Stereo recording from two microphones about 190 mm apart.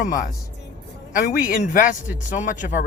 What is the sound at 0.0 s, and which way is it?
Speech, 45° left (ahead or behind).